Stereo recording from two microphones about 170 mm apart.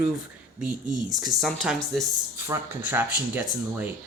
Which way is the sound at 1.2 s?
Centre (ahead or behind).